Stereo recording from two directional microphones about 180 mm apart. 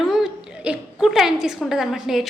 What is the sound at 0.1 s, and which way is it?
A woman's voice, 5° right (ahead or behind).